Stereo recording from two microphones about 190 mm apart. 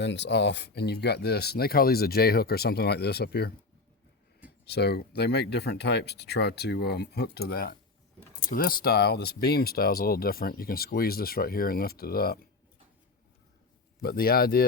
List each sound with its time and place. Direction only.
0.0 s speech: 70° left (ahead or behind)
4.6 s speech: 60° left (ahead or behind)
14.0 s speech: 55° left (ahead or behind)